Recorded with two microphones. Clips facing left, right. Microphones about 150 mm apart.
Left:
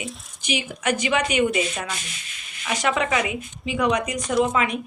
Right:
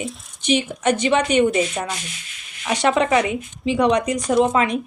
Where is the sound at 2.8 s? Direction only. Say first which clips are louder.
Right 6 dB; 30° right (ahead or behind).